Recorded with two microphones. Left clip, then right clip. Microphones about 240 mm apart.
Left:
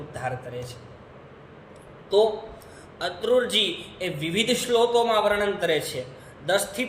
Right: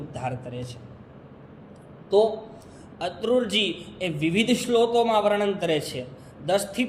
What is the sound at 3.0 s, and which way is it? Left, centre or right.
A man's voice, centre.